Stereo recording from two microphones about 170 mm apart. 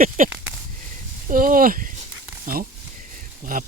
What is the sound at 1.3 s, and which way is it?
Speech, 55° right (ahead or behind).